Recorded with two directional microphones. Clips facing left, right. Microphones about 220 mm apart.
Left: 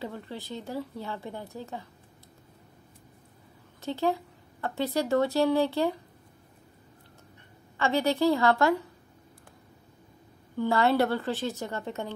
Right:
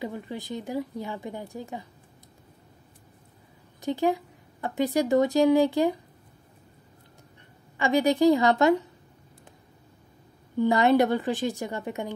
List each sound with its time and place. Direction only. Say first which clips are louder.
0.0 s speech: right 3 dB; 15° right (ahead or behind)
3.8 s speech: right 3 dB; 15° right (ahead or behind)
7.7 s speech: right 3 dB; 15° right (ahead or behind)
10.6 s speech: right 4 dB; 15° right (ahead or behind)